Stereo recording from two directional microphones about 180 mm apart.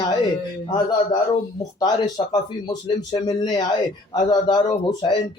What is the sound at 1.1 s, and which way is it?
Speech, 25° left (ahead or behind).